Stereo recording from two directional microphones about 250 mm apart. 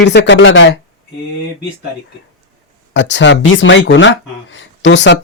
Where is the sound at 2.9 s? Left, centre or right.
Left.